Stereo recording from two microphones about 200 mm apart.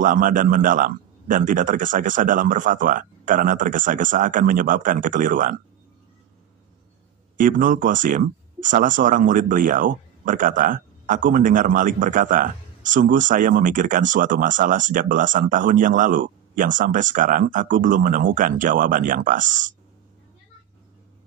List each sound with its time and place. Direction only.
0.0 s speech: 40° right (ahead or behind)
7.3 s speech: 40° right (ahead or behind)